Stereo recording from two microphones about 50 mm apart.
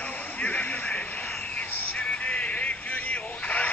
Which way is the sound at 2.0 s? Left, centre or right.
Left.